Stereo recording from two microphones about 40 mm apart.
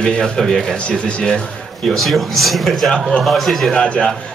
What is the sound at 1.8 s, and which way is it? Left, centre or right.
Speech, centre.